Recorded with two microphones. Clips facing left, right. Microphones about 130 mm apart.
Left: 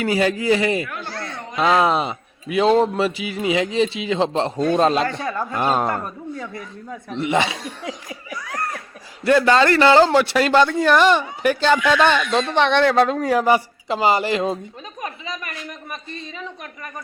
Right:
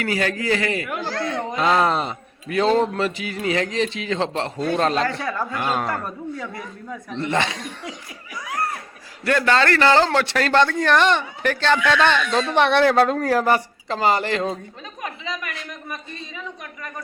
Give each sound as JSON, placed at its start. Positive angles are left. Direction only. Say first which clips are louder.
{"t": 0.0, "sound": "speech", "louder": "left 4 dB", "side_deg": 20}
{"t": 0.9, "sound": "a sound", "louder": "right 5 dB", "side_deg": -90}
{"t": 1.5, "sound": "a man's voice", "louder": "left 3 dB", "side_deg": 15}
{"t": 7.1, "sound": "a man's voice", "louder": "left 3 dB", "side_deg": 10}
{"t": 9.2, "sound": "a man's voice", "louder": "left 4 dB", "side_deg": 20}
{"t": 12.3, "sound": "a woman's voice", "louder": "even", "side_deg": -5}